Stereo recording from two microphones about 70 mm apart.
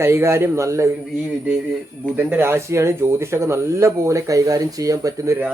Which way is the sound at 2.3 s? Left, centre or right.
Right.